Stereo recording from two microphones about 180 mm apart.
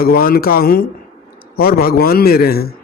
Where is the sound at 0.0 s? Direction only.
55° left (ahead or behind).